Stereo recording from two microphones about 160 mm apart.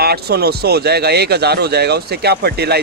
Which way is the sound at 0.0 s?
80° right.